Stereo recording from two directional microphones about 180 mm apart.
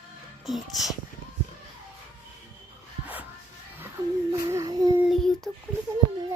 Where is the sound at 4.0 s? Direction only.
25° right (ahead or behind).